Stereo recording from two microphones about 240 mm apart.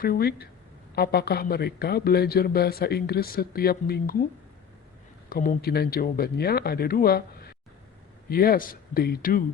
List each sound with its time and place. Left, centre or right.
0.0 s speech: left
5.3 s speech: left